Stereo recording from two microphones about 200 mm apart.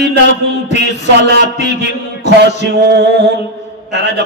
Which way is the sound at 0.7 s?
60° right (ahead or behind).